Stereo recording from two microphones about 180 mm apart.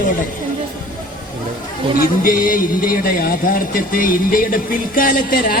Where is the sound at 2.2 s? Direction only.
50° left (ahead or behind).